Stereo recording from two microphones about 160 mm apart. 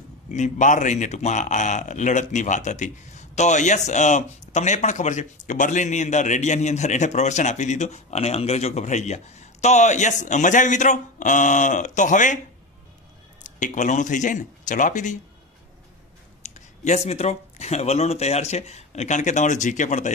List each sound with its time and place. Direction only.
0.3 s speech: 50° left (ahead or behind)
13.4 s speech: 50° left (ahead or behind)
16.4 s speech: 45° left (ahead or behind)